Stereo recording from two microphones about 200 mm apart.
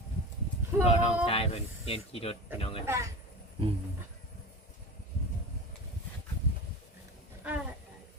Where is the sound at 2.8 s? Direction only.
15° right (ahead or behind).